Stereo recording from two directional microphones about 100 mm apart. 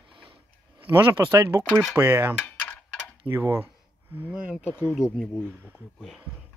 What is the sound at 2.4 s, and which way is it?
Mechanisms, 15° left (ahead or behind).